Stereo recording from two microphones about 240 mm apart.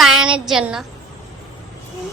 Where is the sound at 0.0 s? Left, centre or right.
Centre.